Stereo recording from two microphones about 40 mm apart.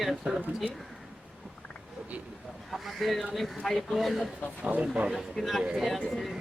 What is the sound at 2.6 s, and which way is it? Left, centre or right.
Speech, centre.